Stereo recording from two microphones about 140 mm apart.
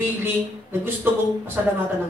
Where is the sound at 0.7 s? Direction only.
15° right (ahead or behind).